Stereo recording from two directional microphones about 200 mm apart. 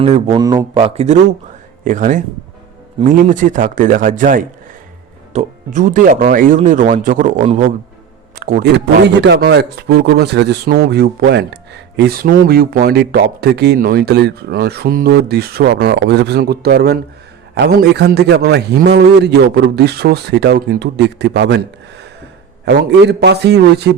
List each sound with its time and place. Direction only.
0.0 s speech: 25° right (ahead or behind); by 8.7 s 45° right (ahead or behind)
8.7 s speech: 60° right (ahead or behind)
22.6 s speech: 55° right (ahead or behind)